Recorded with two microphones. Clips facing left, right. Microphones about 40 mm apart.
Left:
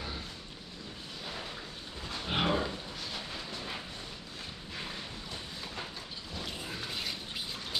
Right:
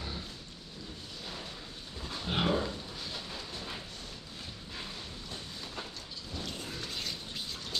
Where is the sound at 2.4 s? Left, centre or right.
Left.